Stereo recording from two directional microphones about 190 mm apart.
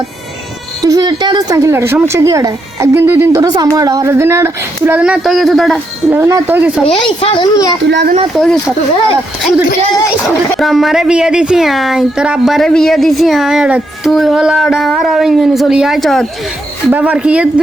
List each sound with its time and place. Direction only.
0.9 s speech: 20° right (ahead or behind); by 5.8 s centre (ahead or behind)
6.1 s speech: 15° right (ahead or behind)
7.0 s a child's voice: 30° left (ahead or behind)
7.9 s speech: 65° right (ahead or behind)
8.4 s speech: centre (ahead or behind)
10.6 s speech: centre (ahead or behind)